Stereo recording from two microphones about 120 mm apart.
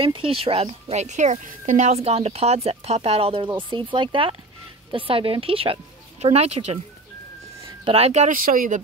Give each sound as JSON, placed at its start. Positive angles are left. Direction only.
{"t": 0.0, "sound": "speech", "side_deg": -50}
{"t": 3.9, "sound": "a woman's voice", "side_deg": -45}
{"t": 6.2, "sound": "speech", "side_deg": -60}
{"t": 7.8, "sound": "speech", "side_deg": -60}